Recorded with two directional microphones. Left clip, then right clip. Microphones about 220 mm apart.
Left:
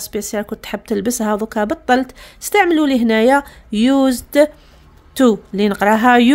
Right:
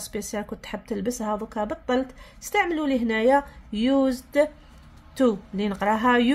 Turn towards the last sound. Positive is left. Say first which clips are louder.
# left 9 dB
turn(degrees=45)  # may be behind; listen again after turning